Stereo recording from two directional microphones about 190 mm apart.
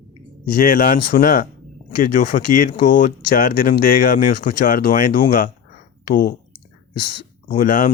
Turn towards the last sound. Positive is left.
turn(degrees=45)  # may be behind; listen again after turning